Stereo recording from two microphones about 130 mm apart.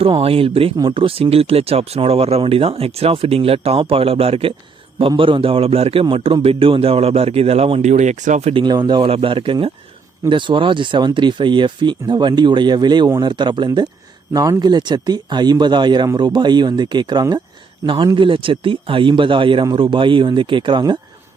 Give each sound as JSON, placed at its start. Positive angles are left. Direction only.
{"t": 0.0, "sound": "speech", "side_deg": -45}
{"t": 8.5, "sound": "speech", "side_deg": -35}